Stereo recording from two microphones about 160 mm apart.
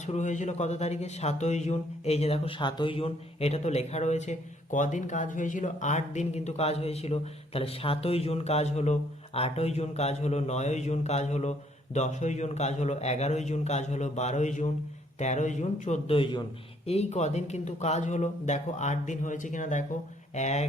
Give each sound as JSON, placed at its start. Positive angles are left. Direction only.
{"t": 0.0, "sound": "speech", "side_deg": 45}